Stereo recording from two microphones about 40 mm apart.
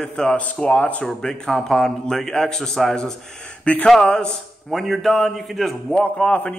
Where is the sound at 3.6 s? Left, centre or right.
Left.